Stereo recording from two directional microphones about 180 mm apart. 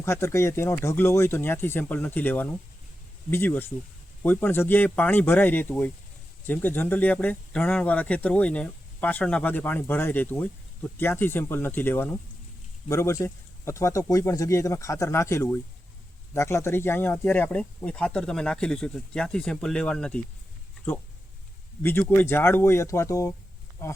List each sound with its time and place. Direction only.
0.0 s speech: 15° left (ahead or behind)
21.8 s speech: 10° left (ahead or behind)